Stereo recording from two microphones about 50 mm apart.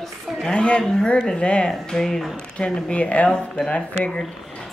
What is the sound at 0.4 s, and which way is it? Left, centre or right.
Speech, centre.